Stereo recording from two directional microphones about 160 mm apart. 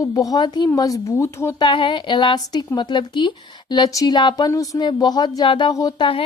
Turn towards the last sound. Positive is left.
turn(degrees=25)  # may be behind; listen again after turning